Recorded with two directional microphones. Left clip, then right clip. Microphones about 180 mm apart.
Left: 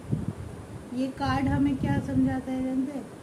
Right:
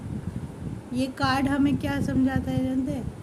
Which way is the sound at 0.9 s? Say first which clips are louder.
Right 3 dB; 60° right (ahead or behind).